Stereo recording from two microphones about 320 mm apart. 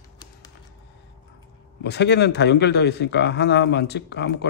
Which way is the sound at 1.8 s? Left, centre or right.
Left.